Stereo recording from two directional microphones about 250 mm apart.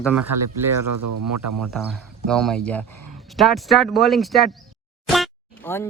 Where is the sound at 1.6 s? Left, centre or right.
Centre.